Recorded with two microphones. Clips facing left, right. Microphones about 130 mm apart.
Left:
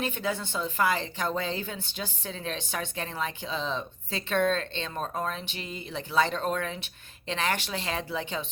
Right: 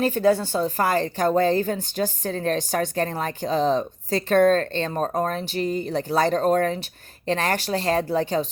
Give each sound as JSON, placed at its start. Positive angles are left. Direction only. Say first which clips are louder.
{"t": 0.0, "sound": "a woman's voice", "louder": "right 11 dB", "side_deg": -40}